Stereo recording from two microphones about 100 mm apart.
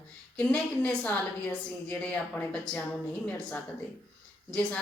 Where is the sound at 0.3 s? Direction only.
15° left (ahead or behind).